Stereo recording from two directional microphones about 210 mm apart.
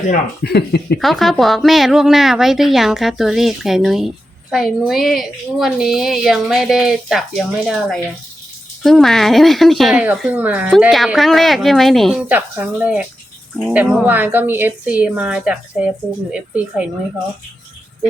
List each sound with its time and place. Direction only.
0.1 s speech: 50° left (ahead or behind)
0.9 s speech: centre (ahead or behind)